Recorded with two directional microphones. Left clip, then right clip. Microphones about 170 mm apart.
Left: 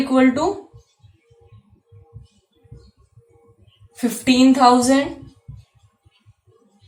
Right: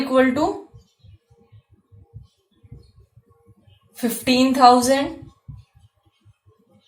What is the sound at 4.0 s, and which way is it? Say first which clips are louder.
Speech: left 2 dB; 35° right (ahead or behind).